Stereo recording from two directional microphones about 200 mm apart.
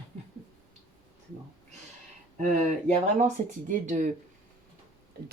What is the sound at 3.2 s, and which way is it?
Speech, 35° right (ahead or behind).